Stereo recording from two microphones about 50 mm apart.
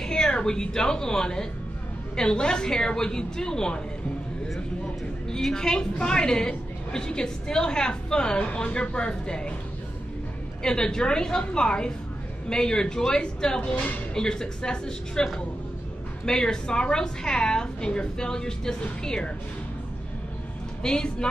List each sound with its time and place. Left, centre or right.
0.0 s a woman's voice: centre
5.3 s a woman's voice: centre
10.6 s a woman's voice: centre
16.3 s a woman's voice: centre
20.8 s a woman's voice: centre